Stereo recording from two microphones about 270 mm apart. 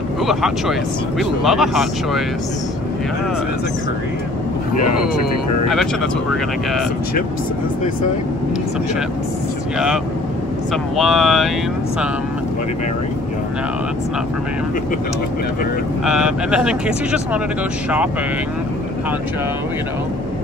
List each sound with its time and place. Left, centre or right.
0.3 s speech: centre
10.7 s speech: centre
16.1 s speech: centre